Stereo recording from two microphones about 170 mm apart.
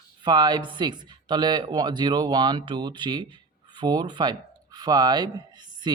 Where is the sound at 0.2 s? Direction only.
25° right (ahead or behind).